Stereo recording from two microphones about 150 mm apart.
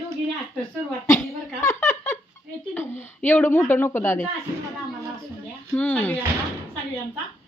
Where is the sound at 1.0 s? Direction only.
15° left (ahead or behind).